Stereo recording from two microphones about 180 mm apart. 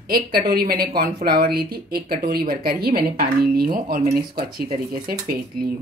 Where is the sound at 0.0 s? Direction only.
55° right (ahead or behind).